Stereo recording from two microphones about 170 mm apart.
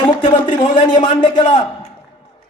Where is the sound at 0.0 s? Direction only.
30° left (ahead or behind).